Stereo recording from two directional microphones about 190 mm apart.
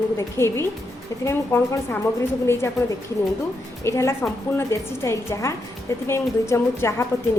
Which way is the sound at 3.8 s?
15° left (ahead or behind).